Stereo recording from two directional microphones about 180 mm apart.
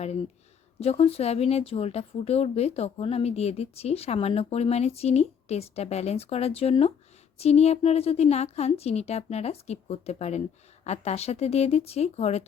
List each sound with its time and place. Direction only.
0.8 s speech: 35° left (ahead or behind)